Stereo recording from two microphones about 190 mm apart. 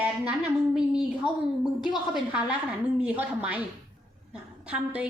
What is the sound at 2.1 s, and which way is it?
A woman's voice, 5° right (ahead or behind).